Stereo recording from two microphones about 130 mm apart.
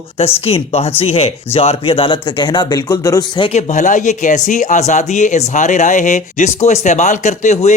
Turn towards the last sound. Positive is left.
turn(degrees=65)  # may be behind; listen again after turning